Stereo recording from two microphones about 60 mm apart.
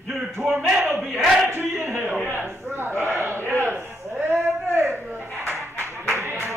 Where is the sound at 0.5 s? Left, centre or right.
Centre.